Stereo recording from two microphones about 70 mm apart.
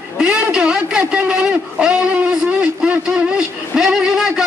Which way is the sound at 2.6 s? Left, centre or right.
Centre.